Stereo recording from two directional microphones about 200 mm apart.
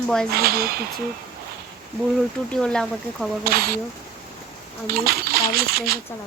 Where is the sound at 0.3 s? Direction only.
50° right (ahead or behind).